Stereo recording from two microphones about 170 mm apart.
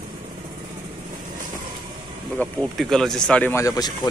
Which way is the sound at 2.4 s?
5° left (ahead or behind).